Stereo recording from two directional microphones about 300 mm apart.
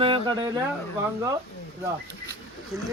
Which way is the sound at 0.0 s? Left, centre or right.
Centre.